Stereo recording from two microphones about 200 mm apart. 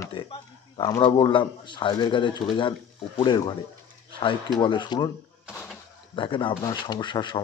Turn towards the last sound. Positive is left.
turn(degrees=20)  # may be behind; listen again after turning